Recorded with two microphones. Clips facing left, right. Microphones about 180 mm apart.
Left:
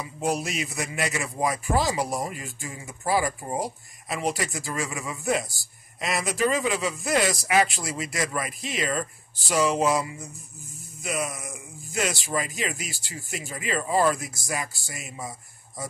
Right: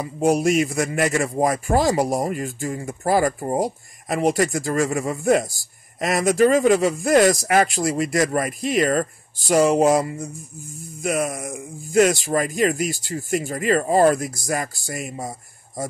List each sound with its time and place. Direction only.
0.0 s speech: 50° right (ahead or behind)